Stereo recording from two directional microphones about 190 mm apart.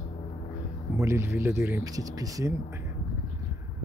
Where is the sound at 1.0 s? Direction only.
15° right (ahead or behind).